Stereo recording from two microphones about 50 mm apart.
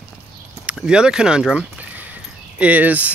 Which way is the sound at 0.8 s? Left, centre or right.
Centre.